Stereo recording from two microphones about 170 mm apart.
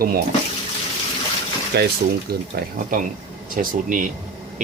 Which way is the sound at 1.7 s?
70° right (ahead or behind).